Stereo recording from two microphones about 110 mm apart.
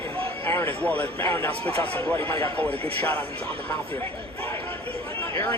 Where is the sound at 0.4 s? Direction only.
20° left (ahead or behind).